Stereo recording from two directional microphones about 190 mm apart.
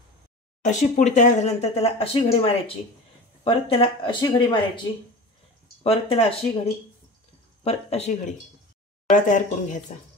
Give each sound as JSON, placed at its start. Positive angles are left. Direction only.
{"t": 0.6, "sound": "speech", "side_deg": 40}
{"t": 5.9, "sound": "speech", "side_deg": 30}